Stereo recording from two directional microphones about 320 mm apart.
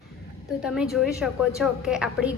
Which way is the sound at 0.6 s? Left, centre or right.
Centre.